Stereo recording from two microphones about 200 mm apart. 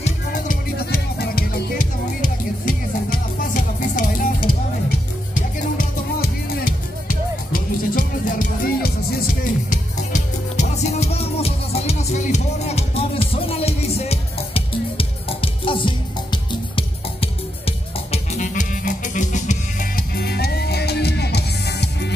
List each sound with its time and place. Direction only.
0.0 s music: 45° left (ahead or behind)
5.3 s music: 45° left (ahead or behind)